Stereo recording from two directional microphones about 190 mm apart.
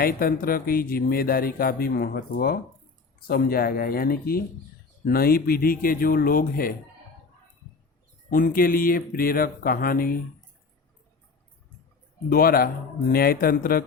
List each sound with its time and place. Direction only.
0.0 s speech: 50° left (ahead or behind)
8.3 s speech: 45° left (ahead or behind)
12.3 s speech: 50° left (ahead or behind)